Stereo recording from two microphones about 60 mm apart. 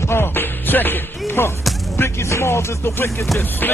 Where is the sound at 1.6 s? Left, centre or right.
Centre.